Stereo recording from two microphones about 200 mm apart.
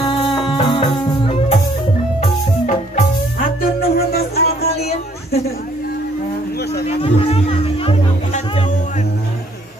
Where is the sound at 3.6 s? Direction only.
50° left (ahead or behind).